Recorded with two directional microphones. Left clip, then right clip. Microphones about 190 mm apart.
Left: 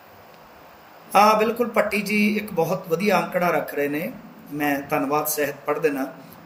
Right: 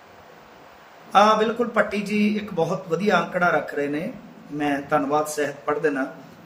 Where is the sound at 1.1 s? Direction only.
5° right (ahead or behind).